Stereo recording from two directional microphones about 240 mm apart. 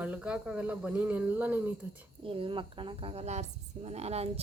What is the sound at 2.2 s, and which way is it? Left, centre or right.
Speech, right.